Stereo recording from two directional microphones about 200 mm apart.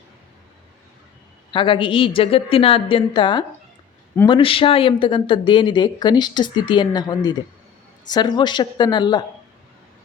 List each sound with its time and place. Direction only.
1.5 s speech: 25° left (ahead or behind)